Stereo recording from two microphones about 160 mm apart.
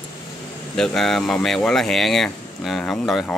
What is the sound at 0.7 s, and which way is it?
Speech, 5° left (ahead or behind).